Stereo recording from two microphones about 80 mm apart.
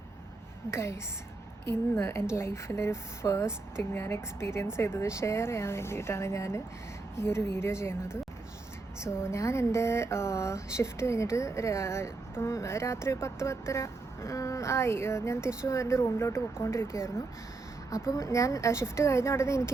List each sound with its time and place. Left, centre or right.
0.7 s speech: left
9.2 s speech: left